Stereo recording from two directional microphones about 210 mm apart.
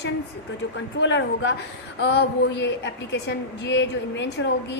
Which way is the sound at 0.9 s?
60° left (ahead or behind).